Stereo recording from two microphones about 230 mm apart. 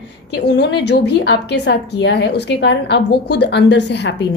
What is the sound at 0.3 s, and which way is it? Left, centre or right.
A woman's voice, left.